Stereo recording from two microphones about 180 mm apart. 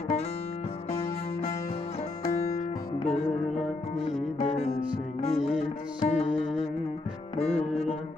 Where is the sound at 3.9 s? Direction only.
40° left (ahead or behind).